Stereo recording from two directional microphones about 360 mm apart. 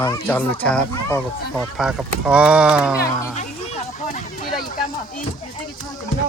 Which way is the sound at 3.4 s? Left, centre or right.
Centre.